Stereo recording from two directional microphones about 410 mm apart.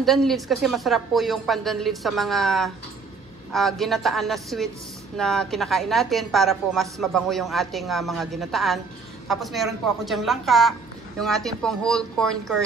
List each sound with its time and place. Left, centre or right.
0.0 s a woman's voice: centre